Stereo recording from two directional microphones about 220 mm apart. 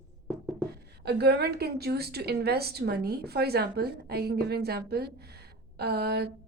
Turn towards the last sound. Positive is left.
turn(degrees=-45)  # may be behind; listen again after turning